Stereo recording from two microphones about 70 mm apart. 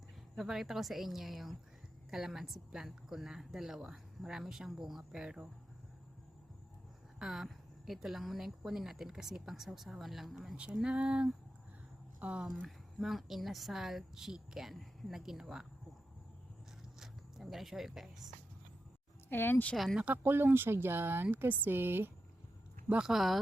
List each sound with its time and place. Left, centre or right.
0.3 s a woman's voice: centre
7.2 s a woman's voice: centre
12.6 s speech: centre
17.0 s speech: centre
19.3 s speech: left
19.7 s speech: centre
20.2 s speech: right
22.9 s a woman's voice: centre
23.1 s speech: centre